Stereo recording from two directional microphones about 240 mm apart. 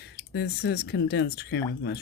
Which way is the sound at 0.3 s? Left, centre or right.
Left.